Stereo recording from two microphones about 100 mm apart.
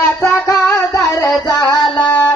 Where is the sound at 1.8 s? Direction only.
50° left (ahead or behind).